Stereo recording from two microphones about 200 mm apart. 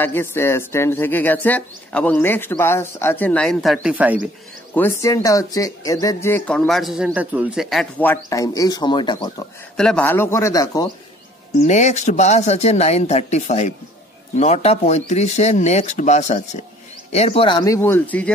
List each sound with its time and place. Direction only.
0.0 s speech: 10° left (ahead or behind); by 4.2 s 5° right (ahead or behind)
4.7 s speech: 15° left (ahead or behind)
9.8 s speech: 5° left (ahead or behind)
11.6 s speech: 35° left (ahead or behind); by 18.3 s 10° left (ahead or behind)